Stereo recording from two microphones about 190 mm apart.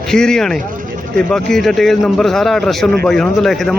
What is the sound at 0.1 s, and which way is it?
A man's voice, 5° left (ahead or behind).